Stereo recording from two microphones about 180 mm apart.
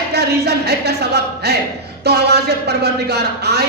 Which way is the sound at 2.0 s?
65° right (ahead or behind).